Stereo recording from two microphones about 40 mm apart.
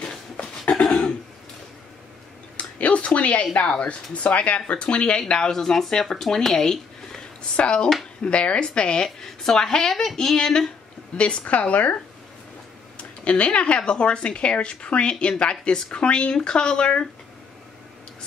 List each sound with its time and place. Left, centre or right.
0.4 s a sound: left
2.5 s a sound: left
3.8 s speech: left
5.5 s a woman's voice: centre
7.5 s a woman's voice: left
11.1 s speech: left